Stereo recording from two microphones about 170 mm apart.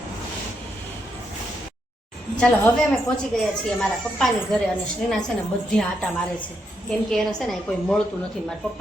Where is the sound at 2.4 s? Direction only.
5° left (ahead or behind).